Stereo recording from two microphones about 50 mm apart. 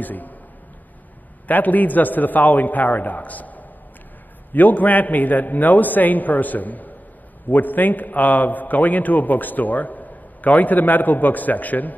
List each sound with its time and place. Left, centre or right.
0.0 s a man's voice: left
1.5 s a man's voice: left